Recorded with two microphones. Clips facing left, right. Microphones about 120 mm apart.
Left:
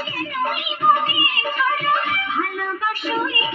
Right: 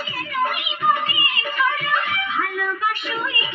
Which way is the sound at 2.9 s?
35° left (ahead or behind).